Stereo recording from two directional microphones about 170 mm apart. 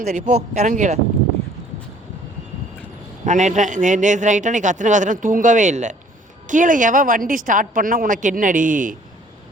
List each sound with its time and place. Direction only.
0.0 s speech: 40° right (ahead or behind)
3.2 s a man's voice: 45° right (ahead or behind)